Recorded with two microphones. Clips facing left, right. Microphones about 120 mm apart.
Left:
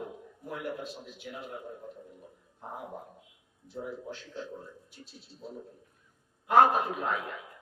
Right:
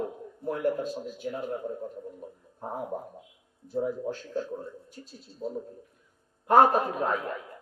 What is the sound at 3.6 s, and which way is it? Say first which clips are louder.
A man's voice: right 9 dB; 45° right (ahead or behind).